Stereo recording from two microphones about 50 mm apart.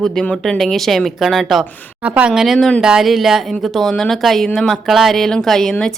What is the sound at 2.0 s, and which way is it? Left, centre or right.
Speech, right.